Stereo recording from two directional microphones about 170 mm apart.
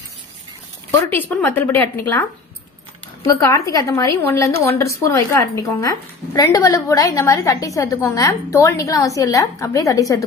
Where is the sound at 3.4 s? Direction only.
20° left (ahead or behind).